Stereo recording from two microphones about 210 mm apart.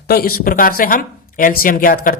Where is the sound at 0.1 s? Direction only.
45° left (ahead or behind).